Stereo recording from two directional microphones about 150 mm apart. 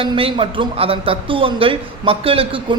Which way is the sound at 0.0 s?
35° right (ahead or behind).